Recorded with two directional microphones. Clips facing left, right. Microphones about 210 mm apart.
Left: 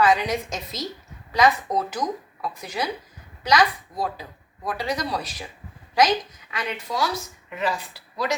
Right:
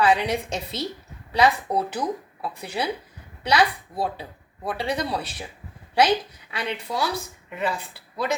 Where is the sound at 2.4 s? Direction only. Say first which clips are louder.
Right 1 dB; 30° right (ahead or behind).